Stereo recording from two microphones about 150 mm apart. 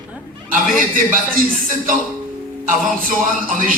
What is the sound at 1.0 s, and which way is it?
Speech, 65° right (ahead or behind).